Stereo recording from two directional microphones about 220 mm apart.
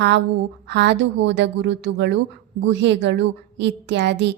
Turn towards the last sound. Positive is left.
turn(degrees=-50)  # may be behind; listen again after turning